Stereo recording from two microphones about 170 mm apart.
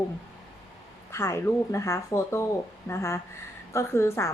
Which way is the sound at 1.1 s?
15° left (ahead or behind).